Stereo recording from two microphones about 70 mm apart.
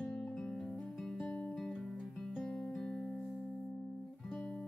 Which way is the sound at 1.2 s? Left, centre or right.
Centre.